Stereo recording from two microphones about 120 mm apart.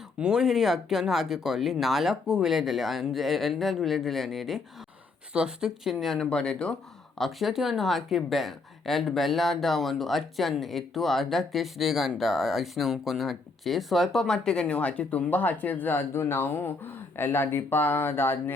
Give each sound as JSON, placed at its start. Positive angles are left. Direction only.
{"t": 0.2, "sound": "speech", "side_deg": -5}